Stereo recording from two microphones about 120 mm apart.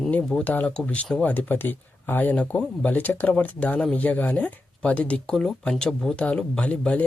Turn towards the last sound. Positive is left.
turn(degrees=10)  # may be behind; listen again after turning